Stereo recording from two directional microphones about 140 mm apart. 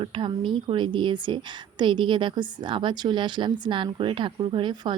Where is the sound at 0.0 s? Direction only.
35° right (ahead or behind).